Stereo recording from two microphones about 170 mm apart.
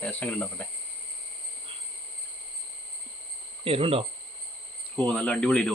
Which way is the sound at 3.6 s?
35° right (ahead or behind).